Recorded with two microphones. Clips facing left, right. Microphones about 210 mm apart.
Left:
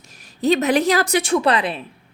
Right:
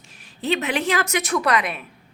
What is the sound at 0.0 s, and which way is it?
A woman's voice, 40° left (ahead or behind).